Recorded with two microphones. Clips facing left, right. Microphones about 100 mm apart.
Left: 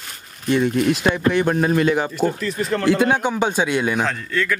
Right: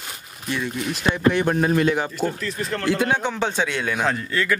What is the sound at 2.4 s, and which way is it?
Speech, 10° left (ahead or behind).